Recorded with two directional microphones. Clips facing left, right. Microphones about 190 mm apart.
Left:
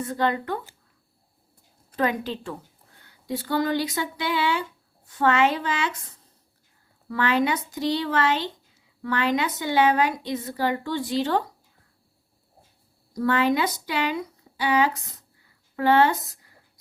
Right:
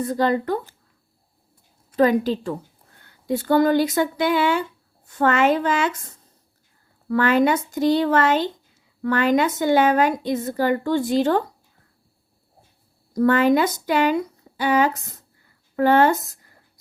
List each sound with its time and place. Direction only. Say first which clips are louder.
0.0 s a woman's voice: right 5 dB; 35° right (ahead or behind)
2.0 s a woman's voice: right 8 dB; 40° right (ahead or behind)
3.0 s a woman's voice: right 6 dB; 50° right (ahead or behind)
13.1 s a woman's voice: right 5 dB; 45° right (ahead or behind)